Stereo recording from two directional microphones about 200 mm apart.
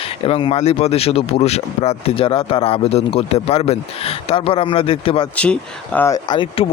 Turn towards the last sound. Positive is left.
turn(degrees=25)  # may be behind; listen again after turning